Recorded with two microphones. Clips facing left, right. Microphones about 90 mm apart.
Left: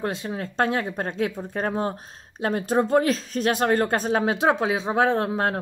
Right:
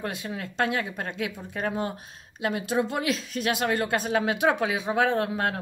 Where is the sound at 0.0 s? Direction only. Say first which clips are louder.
Left 4 dB; 30° left (ahead or behind).